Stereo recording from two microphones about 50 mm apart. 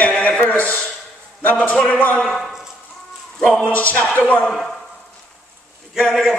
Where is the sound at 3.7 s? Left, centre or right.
Left.